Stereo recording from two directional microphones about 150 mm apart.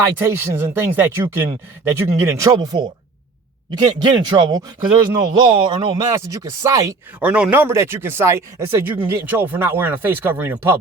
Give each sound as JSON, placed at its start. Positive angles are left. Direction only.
{"t": 0.2, "sound": "speech", "side_deg": -15}
{"t": 7.2, "sound": "speech", "side_deg": -10}